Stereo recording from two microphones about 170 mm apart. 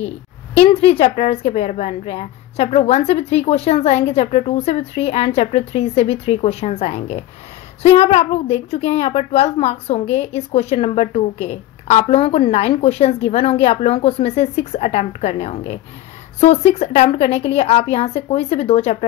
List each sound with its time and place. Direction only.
0.6 s a woman's voice: 35° left (ahead or behind)